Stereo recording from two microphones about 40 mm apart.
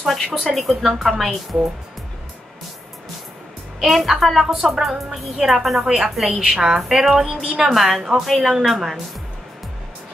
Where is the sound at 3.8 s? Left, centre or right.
Centre.